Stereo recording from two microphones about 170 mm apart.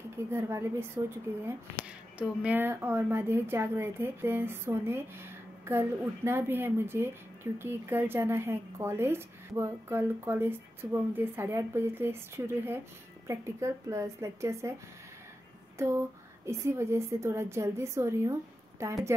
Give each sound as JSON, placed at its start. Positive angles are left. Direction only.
{"t": 0.3, "sound": "speech", "side_deg": -15}
{"t": 16.4, "sound": "speech", "side_deg": -15}